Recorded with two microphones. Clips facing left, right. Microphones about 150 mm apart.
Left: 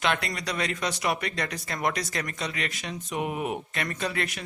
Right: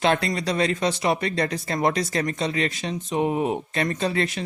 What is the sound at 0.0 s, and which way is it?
Speech, 30° right (ahead or behind).